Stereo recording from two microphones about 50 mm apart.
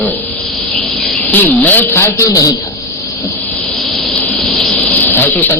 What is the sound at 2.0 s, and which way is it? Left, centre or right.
Speech, left.